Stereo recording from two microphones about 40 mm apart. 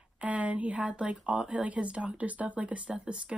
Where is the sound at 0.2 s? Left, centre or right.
Right.